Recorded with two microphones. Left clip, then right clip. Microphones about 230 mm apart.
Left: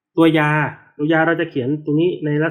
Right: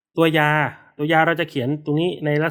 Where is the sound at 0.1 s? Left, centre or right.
Right.